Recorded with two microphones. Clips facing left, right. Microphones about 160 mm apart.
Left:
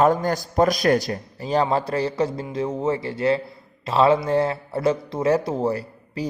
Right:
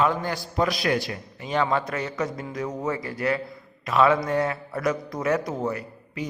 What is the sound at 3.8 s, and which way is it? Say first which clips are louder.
A man's voice: left 3 dB; 30° left (ahead or behind).